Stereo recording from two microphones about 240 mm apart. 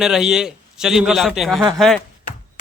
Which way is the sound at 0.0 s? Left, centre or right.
Centre.